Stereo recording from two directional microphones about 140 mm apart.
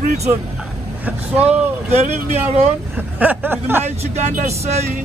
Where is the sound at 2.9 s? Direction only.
10° right (ahead or behind).